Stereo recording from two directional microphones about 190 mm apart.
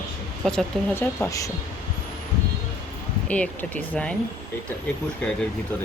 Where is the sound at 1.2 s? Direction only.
15° left (ahead or behind).